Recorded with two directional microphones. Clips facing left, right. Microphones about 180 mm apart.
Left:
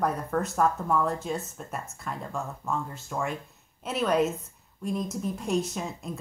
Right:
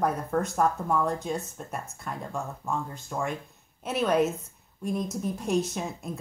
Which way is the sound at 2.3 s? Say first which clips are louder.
Even; 15° right (ahead or behind).